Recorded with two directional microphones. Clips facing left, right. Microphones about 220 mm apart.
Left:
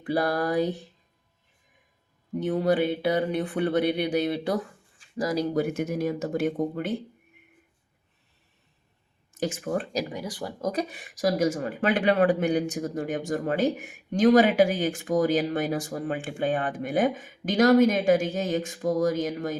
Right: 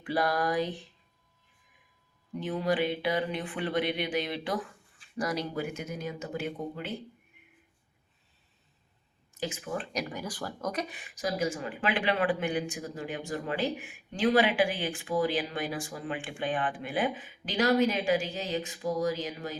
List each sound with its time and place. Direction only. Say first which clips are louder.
0.0 s speech: left 3 dB; 40° left (ahead or behind)
2.3 s speech: left 6 dB; 45° left (ahead or behind)
6.2 s speech: left 9 dB; 45° left (ahead or behind)
9.4 s speech: left 7 dB; 45° left (ahead or behind)
10.1 s speech: left 3 dB; 25° left (ahead or behind); by 19.5 s 45° left (ahead or behind)